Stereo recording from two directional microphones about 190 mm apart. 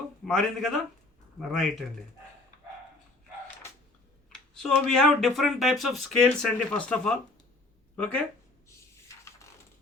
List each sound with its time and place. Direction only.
0.3 s speech: centre (ahead or behind)
4.3 s speech: 5° left (ahead or behind)
8.6 s a sound: 15° left (ahead or behind)